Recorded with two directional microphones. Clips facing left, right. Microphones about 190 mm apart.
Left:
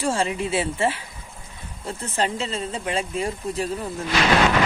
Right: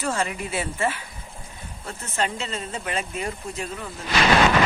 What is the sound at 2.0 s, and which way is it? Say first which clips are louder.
Speech: left 2 dB; 35° left (ahead or behind).